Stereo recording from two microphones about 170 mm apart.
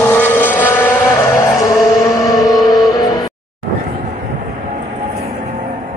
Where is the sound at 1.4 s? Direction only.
20° left (ahead or behind).